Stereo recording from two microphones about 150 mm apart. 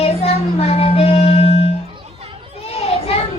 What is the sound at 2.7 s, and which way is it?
Children playing, 40° left (ahead or behind).